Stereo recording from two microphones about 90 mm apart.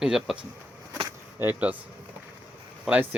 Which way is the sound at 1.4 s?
15° right (ahead or behind).